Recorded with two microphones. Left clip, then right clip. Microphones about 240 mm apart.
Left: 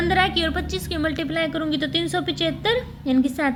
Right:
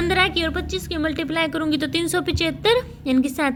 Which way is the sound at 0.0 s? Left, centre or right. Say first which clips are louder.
Even; centre.